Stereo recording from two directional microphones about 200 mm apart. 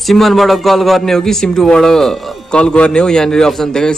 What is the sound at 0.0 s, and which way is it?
A man's voice, centre (ahead or behind).